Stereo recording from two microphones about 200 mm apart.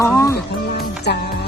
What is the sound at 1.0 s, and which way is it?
Speech, 55° left (ahead or behind).